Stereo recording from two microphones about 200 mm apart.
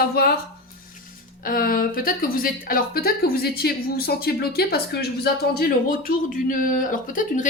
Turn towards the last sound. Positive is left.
turn(degrees=40)  # may be behind; listen again after turning